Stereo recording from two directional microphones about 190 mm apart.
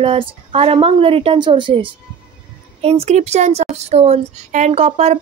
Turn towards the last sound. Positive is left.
turn(degrees=-35)  # may be behind; listen again after turning